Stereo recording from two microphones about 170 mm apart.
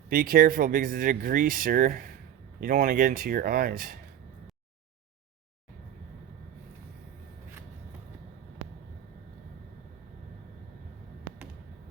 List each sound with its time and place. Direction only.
0.1 s speech: 60° right (ahead or behind)